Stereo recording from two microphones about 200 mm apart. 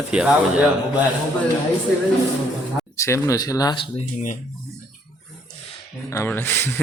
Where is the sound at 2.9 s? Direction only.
15° left (ahead or behind).